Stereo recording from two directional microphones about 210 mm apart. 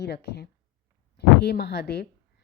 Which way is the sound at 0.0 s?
50° left (ahead or behind).